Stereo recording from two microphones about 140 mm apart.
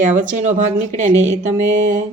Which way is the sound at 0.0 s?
70° right (ahead or behind).